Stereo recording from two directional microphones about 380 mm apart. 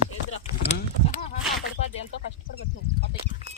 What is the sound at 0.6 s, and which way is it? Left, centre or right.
Speech, centre.